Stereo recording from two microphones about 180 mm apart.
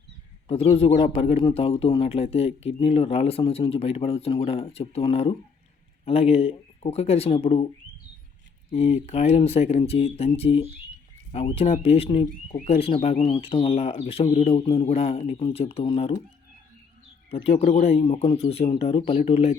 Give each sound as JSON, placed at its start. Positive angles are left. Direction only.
{"t": 0.4, "sound": "a man's voice", "side_deg": 30}
{"t": 8.7, "sound": "a man's voice", "side_deg": 35}
{"t": 17.3, "sound": "a man's voice", "side_deg": 35}